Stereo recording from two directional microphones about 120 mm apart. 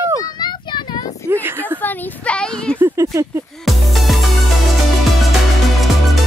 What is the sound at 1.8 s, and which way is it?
Speech, 10° left (ahead or behind).